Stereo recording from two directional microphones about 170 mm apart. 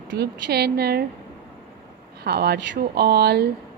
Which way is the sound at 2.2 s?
70° right (ahead or behind).